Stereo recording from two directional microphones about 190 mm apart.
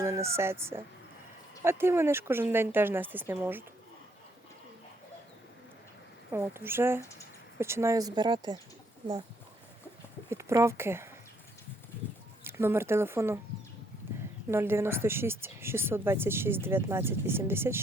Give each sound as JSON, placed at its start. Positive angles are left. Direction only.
{"t": 0.0, "sound": "a woman's voice", "side_deg": -15}
{"t": 6.3, "sound": "a woman's voice", "side_deg": -15}
{"t": 10.2, "sound": "speech", "side_deg": -15}
{"t": 12.5, "sound": "a woman's voice", "side_deg": -10}
{"t": 14.5, "sound": "a woman's voice", "side_deg": -10}